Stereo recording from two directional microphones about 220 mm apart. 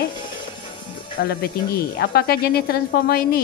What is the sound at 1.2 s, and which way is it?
Speech, 45° left (ahead or behind).